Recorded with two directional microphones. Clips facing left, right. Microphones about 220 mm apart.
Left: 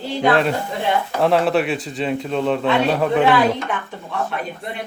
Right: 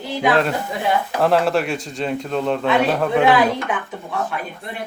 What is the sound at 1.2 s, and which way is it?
Speech, centre (ahead or behind).